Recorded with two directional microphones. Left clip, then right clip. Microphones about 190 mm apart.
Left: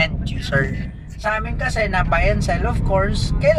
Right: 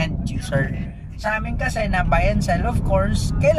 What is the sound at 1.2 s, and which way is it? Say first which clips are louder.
Speech: left 2 dB; 5° right (ahead or behind).